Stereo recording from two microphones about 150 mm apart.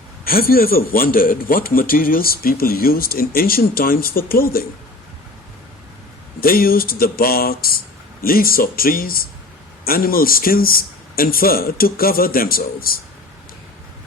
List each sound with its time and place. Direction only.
0.3 s speech: 80° left
6.4 s speech: 75° left (ahead or behind)